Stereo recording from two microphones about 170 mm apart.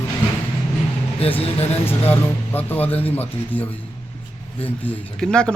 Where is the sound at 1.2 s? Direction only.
35° left (ahead or behind).